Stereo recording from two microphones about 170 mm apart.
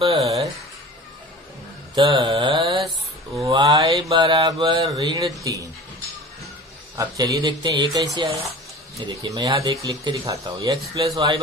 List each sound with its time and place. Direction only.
0.2 s a sound: 20° right (ahead or behind)
2.0 s mantra: 25° right (ahead or behind)
4.1 s speech: 25° right (ahead or behind)
7.0 s speech: 20° right (ahead or behind)